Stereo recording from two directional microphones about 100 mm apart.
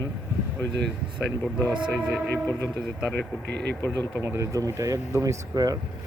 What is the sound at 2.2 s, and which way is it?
Speech, 20° left (ahead or behind).